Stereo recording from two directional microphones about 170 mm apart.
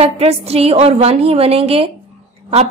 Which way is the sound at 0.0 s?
35° right (ahead or behind).